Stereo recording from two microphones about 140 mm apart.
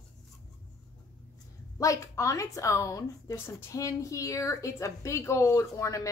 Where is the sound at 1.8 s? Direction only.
25° left (ahead or behind).